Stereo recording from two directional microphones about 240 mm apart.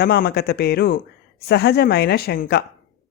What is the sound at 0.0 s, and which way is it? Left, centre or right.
Speech, left.